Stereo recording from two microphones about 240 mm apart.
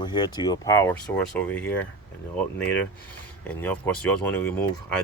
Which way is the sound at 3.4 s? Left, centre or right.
Centre.